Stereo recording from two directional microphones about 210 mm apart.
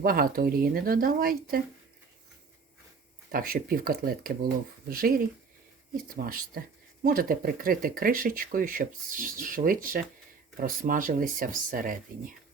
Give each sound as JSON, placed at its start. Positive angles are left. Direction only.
{"t": 0.0, "sound": "speech", "side_deg": -45}
{"t": 3.3, "sound": "speech", "side_deg": -45}